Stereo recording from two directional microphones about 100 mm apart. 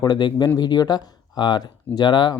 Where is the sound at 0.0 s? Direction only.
45° left (ahead or behind).